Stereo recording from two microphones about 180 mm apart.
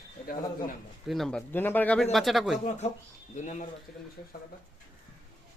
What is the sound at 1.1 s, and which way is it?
Speech, centre (ahead or behind).